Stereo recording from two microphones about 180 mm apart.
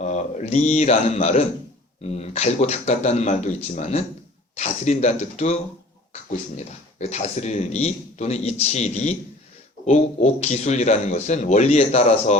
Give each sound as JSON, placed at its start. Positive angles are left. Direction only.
{"t": 0.0, "sound": "a man's voice", "side_deg": 40}
{"t": 6.6, "sound": "a man's voice", "side_deg": 40}